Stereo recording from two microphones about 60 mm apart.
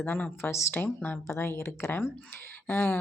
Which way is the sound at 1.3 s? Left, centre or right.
Left.